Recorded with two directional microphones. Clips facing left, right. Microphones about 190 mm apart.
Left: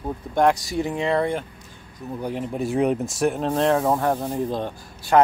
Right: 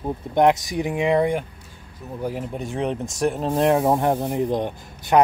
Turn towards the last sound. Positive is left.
turn(degrees=-20)  # may be behind; listen again after turning